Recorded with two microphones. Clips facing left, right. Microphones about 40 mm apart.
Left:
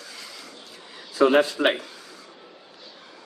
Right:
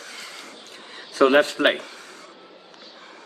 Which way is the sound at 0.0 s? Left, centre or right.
Right.